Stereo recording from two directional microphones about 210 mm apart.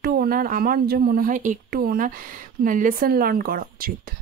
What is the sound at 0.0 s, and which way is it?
Speech, 45° right (ahead or behind).